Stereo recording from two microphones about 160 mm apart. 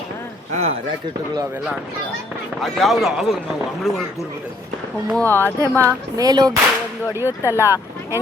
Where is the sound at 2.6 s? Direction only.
Centre (ahead or behind).